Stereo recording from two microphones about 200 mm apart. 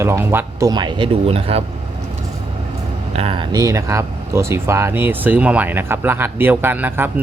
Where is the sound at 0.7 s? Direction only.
20° right (ahead or behind).